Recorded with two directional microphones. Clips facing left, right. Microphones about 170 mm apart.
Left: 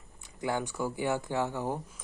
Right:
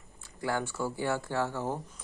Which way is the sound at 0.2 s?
20° left (ahead or behind).